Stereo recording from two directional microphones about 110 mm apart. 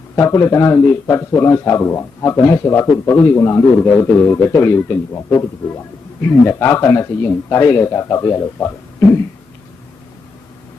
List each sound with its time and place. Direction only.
0.2 s a man's voice: 25° left (ahead or behind)